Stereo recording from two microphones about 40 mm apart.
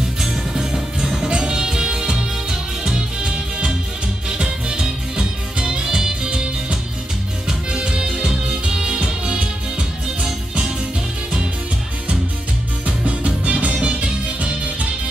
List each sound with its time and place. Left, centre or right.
0.2 s music: centre
12.8 s music: right